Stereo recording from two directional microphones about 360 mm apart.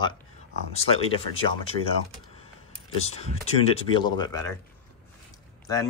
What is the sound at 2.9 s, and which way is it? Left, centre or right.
Speech, centre.